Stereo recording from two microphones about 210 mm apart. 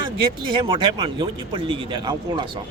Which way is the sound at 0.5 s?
25° right (ahead or behind).